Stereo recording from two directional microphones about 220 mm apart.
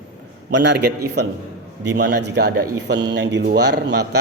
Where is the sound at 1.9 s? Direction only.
50° right (ahead or behind).